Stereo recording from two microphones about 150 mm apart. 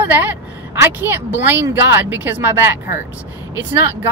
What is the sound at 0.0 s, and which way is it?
A woman's voice, 10° right (ahead or behind).